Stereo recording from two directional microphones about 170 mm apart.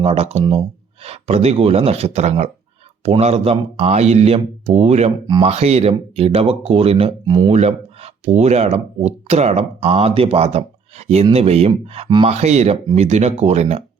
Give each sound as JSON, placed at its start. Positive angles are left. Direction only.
{"t": 0.0, "sound": "speech", "side_deg": -35}
{"t": 7.5, "sound": "speech", "side_deg": -40}